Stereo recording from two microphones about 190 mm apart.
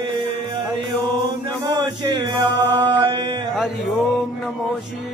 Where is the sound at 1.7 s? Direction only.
25° right (ahead or behind).